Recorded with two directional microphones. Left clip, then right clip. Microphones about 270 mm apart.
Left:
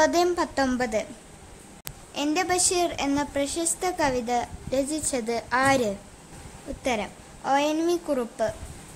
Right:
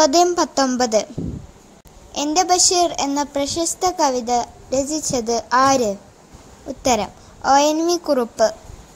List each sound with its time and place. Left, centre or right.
0.0 s a woman's voice: centre
2.1 s a woman's voice: centre